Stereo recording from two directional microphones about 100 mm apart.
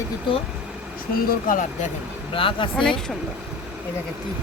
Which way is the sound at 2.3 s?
60° left (ahead or behind).